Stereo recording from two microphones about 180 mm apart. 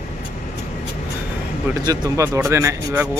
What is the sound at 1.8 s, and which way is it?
Speech, 20° right (ahead or behind).